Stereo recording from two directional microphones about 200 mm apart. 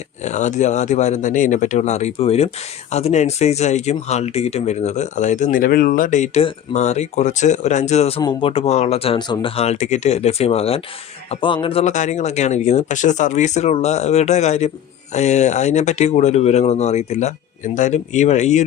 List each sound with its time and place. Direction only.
0.2 s speech: 35° left (ahead or behind)